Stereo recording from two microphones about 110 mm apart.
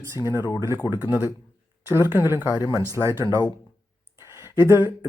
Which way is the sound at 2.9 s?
25° right (ahead or behind).